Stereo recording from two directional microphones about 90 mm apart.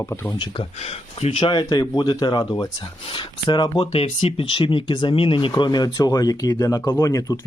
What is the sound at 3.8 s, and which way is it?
Speech, 80° left.